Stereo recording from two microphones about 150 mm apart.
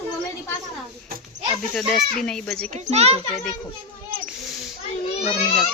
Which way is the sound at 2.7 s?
45° right (ahead or behind).